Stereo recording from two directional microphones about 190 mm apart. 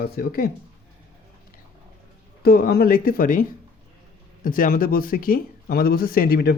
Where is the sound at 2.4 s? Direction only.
55° left (ahead or behind).